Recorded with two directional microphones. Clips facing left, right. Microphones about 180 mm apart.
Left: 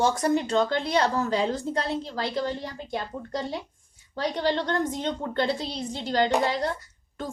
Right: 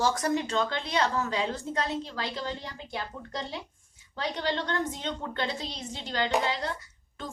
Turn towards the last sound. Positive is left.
turn(degrees=40)  # may be behind; listen again after turning